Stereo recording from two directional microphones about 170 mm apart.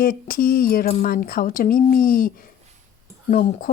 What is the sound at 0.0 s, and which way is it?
A woman's voice, 55° left (ahead or behind).